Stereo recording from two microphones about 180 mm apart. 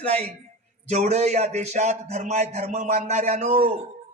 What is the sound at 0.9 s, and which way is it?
A man's voice, 40° right (ahead or behind).